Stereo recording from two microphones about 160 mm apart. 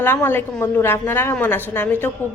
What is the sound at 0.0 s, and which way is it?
A woman's voice, 15° left (ahead or behind).